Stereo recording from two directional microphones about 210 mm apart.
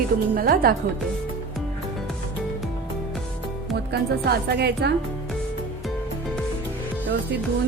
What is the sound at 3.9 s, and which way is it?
A woman's voice, 50° right (ahead or behind).